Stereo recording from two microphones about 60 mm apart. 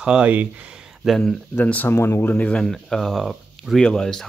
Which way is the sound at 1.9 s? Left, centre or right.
Left.